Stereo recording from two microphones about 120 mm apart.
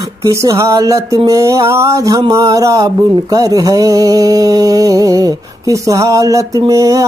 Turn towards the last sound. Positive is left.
turn(degrees=-25)  # may be behind; listen again after turning